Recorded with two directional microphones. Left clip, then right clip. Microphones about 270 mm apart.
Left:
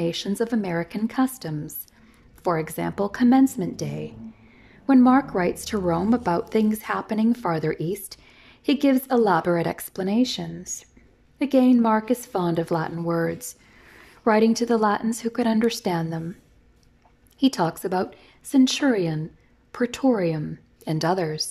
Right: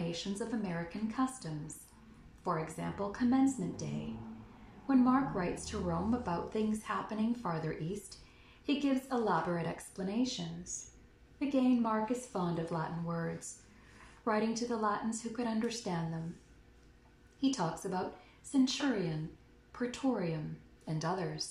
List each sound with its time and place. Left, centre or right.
0.1 s a woman's voice: left
4.8 s a woman's voice: left
17.4 s a woman's voice: left